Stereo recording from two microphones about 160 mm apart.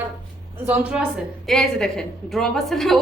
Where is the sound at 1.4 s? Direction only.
5° left (ahead or behind).